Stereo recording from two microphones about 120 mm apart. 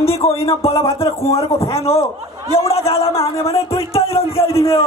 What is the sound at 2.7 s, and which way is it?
Speech, 55° left (ahead or behind).